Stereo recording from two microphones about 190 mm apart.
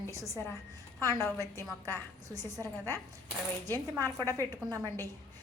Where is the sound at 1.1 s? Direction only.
15° left (ahead or behind).